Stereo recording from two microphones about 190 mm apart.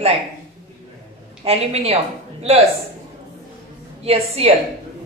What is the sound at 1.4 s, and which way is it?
Speech, 30° right (ahead or behind).